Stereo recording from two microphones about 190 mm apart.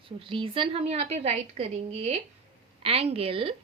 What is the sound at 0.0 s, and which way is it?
A woman's voice, 25° right (ahead or behind).